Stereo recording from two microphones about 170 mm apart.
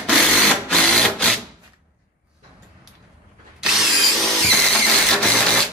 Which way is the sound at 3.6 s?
Centre (ahead or behind).